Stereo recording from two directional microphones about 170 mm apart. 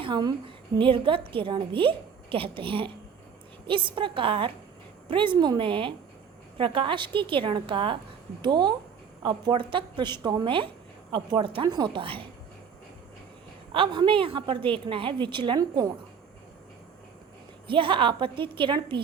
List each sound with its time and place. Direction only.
0.0 s a woman's voice: 25° right (ahead or behind)
13.7 s a woman's voice: 30° right (ahead or behind)
17.7 s a woman's voice: 30° right (ahead or behind)